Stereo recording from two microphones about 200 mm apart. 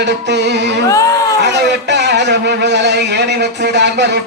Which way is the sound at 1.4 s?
60° right (ahead or behind).